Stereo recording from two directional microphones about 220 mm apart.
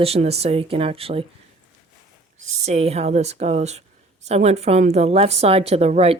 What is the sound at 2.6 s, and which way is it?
A woman's voice, 30° right (ahead or behind).